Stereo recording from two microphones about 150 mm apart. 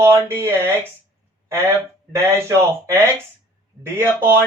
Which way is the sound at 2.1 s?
15° right (ahead or behind).